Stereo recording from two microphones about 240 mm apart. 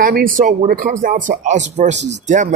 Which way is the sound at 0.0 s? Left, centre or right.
Right.